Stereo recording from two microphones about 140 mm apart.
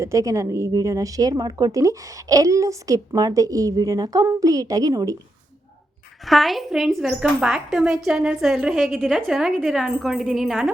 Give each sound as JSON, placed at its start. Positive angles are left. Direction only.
{"t": 0.0, "sound": "a woman's voice", "side_deg": -20}
{"t": 6.2, "sound": "speech", "side_deg": 0}